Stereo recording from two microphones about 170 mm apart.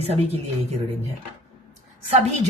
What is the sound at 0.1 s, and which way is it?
Speech, 35° right (ahead or behind).